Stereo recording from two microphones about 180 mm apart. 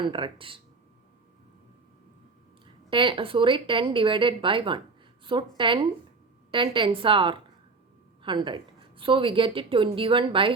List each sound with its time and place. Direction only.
0.0 s a woman's voice: 30° right (ahead or behind)
2.9 s a woman's voice: 30° right (ahead or behind)